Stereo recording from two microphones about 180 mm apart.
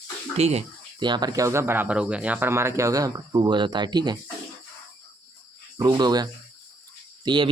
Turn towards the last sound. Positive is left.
turn(degrees=-25)  # may be behind; listen again after turning